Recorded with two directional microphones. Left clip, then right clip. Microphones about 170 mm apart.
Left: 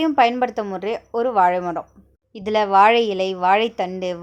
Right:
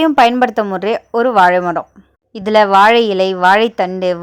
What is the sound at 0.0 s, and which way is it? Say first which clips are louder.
A woman's voice: right 7 dB; 30° right (ahead or behind).